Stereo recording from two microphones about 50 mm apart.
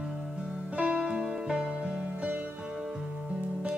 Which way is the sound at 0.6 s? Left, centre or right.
Right.